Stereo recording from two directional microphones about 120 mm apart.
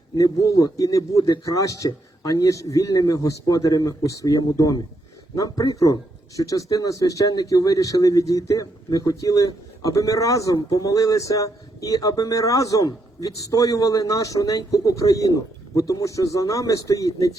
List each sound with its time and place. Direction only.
0.2 s speech: 30° left (ahead or behind)